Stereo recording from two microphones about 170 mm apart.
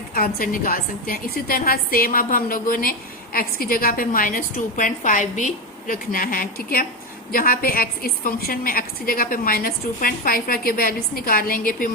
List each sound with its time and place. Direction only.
0.1 s a woman's voice: 60° left (ahead or behind)